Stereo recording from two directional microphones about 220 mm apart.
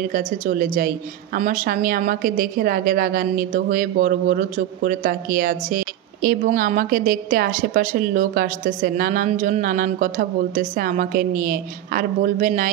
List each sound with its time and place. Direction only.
0.1 s a woman's voice: 40° right (ahead or behind)